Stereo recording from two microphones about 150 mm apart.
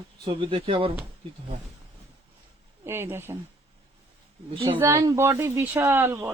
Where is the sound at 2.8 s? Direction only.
15° right (ahead or behind).